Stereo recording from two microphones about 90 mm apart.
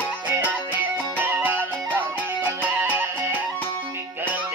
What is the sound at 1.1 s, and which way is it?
Music, 20° right (ahead or behind).